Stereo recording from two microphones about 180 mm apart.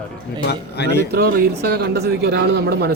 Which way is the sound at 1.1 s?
60° right (ahead or behind).